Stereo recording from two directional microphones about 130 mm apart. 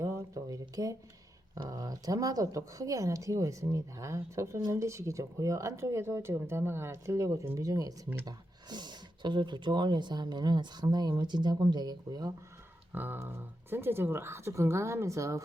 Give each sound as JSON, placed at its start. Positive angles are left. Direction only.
{"t": 0.0, "sound": "a sound", "side_deg": -25}
{"t": 1.5, "sound": "speech", "side_deg": -35}
{"t": 12.9, "sound": "speech", "side_deg": -15}